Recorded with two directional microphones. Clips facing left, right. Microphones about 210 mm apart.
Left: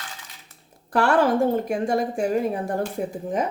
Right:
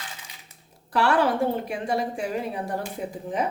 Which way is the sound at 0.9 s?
45° left (ahead or behind).